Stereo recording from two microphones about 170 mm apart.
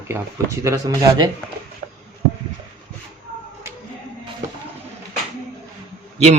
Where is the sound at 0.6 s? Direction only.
20° right (ahead or behind).